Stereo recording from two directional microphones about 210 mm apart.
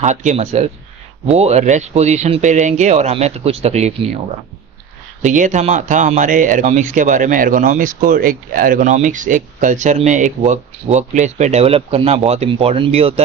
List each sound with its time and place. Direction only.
0.0 s speech: 35° right (ahead or behind)
5.2 s speech: 35° right (ahead or behind)